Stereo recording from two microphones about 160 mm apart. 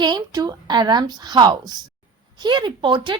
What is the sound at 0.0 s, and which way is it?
Speech, 25° right (ahead or behind).